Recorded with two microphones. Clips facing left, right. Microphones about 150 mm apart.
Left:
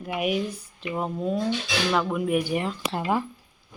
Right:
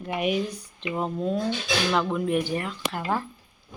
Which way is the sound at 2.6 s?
30° left (ahead or behind).